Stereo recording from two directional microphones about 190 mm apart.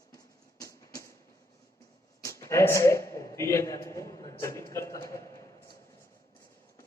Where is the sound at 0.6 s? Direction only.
15° left (ahead or behind).